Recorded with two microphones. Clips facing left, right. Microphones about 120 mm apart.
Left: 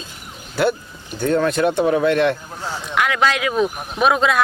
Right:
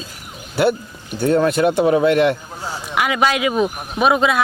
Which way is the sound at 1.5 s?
5° right (ahead or behind).